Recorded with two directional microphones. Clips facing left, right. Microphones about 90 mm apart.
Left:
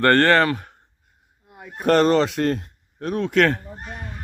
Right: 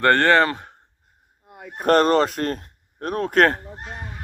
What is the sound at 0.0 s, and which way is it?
Speech, 15° right (ahead or behind).